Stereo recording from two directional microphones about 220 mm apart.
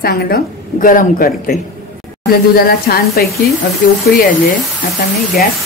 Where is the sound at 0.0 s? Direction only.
45° left (ahead or behind).